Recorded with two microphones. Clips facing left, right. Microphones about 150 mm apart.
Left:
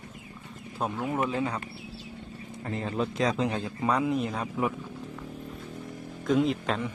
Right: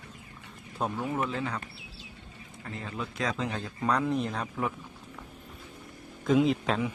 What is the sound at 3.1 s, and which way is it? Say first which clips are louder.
Speech: left 3 dB; 20° left (ahead or behind).